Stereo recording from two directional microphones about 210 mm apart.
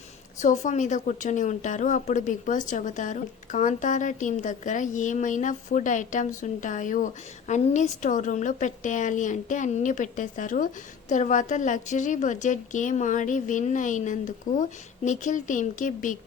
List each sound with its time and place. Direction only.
0.3 s a woman's voice: 35° left (ahead or behind)